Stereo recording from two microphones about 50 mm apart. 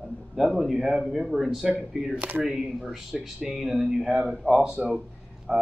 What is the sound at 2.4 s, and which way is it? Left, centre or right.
Speech, centre.